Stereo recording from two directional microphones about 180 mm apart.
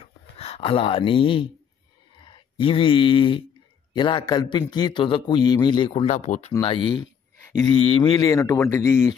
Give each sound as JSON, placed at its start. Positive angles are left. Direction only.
{"t": 0.0, "sound": "a sound", "side_deg": 35}
{"t": 2.2, "sound": "a man's voice", "side_deg": 25}
{"t": 6.6, "sound": "a man's voice", "side_deg": 25}